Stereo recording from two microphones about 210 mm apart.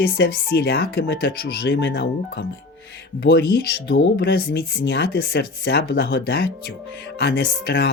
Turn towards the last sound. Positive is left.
turn(degrees=50)  # may be behind; listen again after turning